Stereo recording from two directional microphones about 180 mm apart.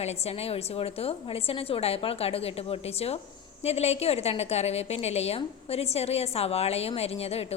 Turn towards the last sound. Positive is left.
turn(degrees=35)  # may be behind; listen again after turning